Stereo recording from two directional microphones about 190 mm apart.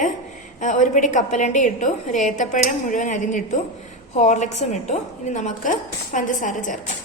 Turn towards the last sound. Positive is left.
turn(degrees=45)  # may be behind; listen again after turning